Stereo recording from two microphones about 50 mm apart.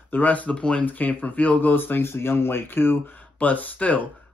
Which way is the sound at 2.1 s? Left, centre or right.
Left.